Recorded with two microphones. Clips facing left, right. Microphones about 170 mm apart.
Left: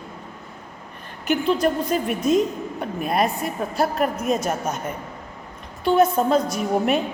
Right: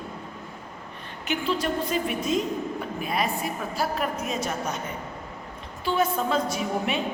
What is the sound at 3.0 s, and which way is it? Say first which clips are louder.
A woman's voice: left 6 dB; 50° left (ahead or behind).